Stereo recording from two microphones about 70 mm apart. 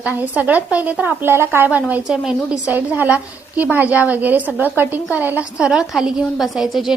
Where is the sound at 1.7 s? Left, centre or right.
Right.